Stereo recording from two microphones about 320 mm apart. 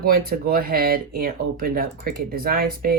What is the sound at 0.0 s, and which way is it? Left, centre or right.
Speech, right.